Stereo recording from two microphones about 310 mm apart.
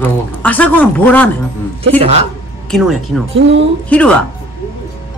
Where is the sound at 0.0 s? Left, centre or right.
Centre.